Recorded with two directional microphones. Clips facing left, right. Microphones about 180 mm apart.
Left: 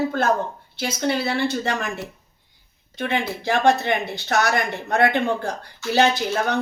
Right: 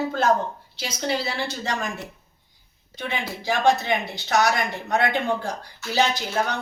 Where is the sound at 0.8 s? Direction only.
55° left (ahead or behind).